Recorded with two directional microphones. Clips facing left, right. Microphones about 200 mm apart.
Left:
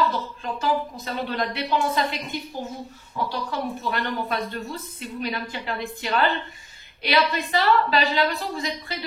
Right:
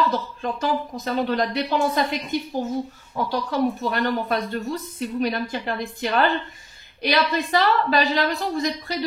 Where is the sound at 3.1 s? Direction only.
40° right (ahead or behind).